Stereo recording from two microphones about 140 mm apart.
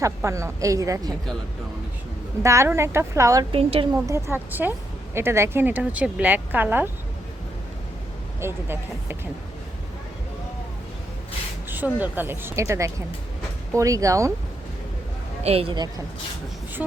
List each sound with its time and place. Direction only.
0.0 s a woman's voice: 20° right (ahead or behind)
2.4 s a woman's voice: 20° right (ahead or behind)
3.5 s a woman's voice: 45° right (ahead or behind)
3.9 s a woman's voice: 20° right (ahead or behind)
8.4 s a woman's voice: 15° right (ahead or behind)
11.9 s a woman's voice: 15° right (ahead or behind)
15.4 s a woman's voice: 45° right (ahead or behind)